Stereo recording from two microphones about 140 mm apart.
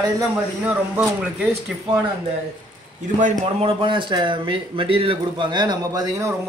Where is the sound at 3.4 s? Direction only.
40° right (ahead or behind).